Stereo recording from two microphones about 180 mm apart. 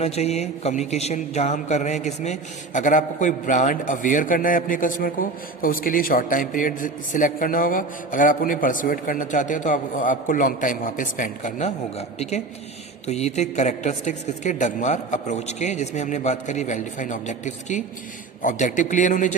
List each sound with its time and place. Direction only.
0.0 s a man's voice: 35° left (ahead or behind)